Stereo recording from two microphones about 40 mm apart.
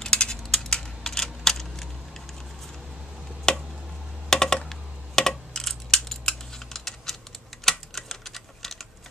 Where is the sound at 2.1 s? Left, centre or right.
Centre.